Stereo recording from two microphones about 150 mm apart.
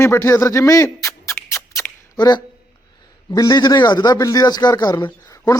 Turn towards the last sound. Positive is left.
turn(degrees=20)  # may be behind; listen again after turning